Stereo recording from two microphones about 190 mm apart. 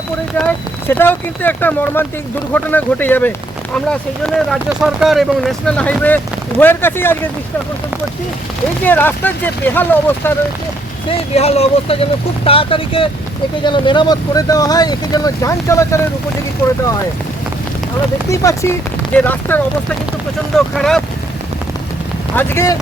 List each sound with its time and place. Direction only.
0.3 s speech: 10° left (ahead or behind)
8.8 s speech: 10° left (ahead or behind)
11.1 s speech: 35° left (ahead or behind); by 16.0 s 15° left (ahead or behind)
18.3 s speech: 15° left (ahead or behind)
22.4 s speech: 10° left (ahead or behind)